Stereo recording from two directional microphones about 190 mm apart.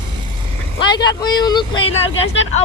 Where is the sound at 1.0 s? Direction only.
20° left (ahead or behind).